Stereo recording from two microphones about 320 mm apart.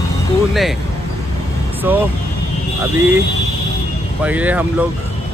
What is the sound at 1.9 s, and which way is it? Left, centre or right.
Speech, centre.